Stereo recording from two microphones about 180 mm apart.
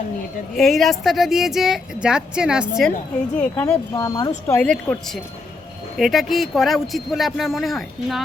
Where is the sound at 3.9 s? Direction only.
20° left (ahead or behind).